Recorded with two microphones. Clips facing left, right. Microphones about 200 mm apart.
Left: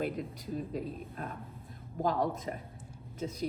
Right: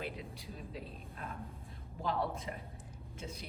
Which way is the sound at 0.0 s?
45° left (ahead or behind).